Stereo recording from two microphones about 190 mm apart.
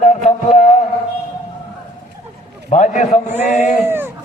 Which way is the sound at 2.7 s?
40° left (ahead or behind).